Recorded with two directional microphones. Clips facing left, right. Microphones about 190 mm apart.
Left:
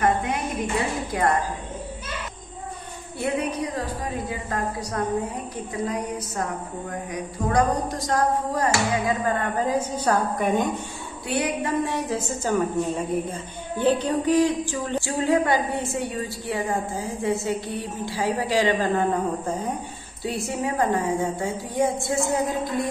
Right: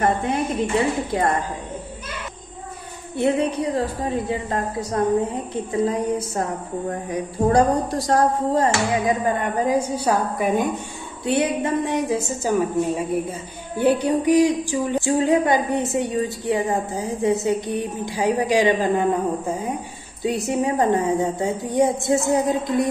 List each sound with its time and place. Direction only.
0.0 s a woman's voice: 30° right (ahead or behind)
3.2 s a woman's voice: 30° right (ahead or behind); by 10.7 s 10° right (ahead or behind)
11.2 s a woman's voice: 25° right (ahead or behind)